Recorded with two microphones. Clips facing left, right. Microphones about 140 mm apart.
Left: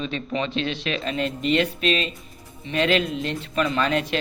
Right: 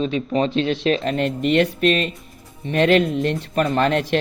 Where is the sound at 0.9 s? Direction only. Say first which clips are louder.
Right 6 dB; 55° right (ahead or behind).